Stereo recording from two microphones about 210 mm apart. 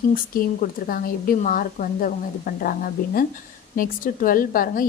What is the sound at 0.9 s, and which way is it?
A woman's voice, 45° left (ahead or behind).